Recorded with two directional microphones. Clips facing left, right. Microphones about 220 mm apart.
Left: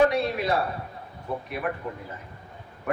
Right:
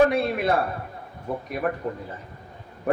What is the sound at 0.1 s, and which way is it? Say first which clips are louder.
A man's voice: right 2 dB; 55° right (ahead or behind).